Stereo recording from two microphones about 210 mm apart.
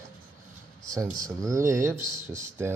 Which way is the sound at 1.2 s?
15° right (ahead or behind).